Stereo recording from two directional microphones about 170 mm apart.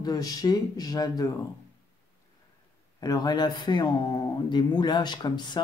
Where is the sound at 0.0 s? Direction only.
20° left (ahead or behind).